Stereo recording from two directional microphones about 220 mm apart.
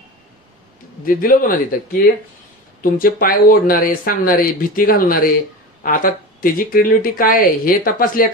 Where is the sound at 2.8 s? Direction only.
40° left (ahead or behind).